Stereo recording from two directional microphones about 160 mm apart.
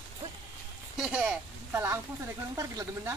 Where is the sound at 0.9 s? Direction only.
5° right (ahead or behind).